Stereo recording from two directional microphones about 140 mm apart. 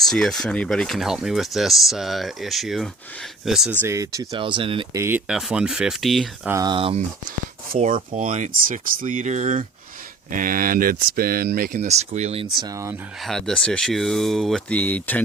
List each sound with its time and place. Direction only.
0.0 s speech: centre (ahead or behind); by 4.9 s 40° right (ahead or behind)
4.9 s speech: 15° right (ahead or behind)
5.3 s speech: 5° right (ahead or behind)
6.5 s speech: 25° right (ahead or behind)
6.7 s speech: 40° right (ahead or behind)
8.1 s speech: 65° right (ahead or behind)
10.3 s speech: 80° right; by 12.6 s 45° right (ahead or behind)
12.6 s speech: 20° right (ahead or behind)
13.2 s speech: 5° left (ahead or behind)